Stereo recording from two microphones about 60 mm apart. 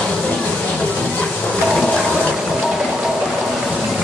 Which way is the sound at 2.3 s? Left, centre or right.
Centre.